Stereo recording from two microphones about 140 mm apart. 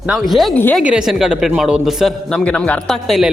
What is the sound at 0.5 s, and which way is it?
Speech, 10° left (ahead or behind).